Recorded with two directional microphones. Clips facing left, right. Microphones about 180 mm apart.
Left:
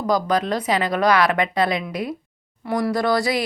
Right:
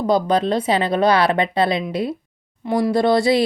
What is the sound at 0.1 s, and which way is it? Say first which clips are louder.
Speech: right 3 dB; 30° right (ahead or behind).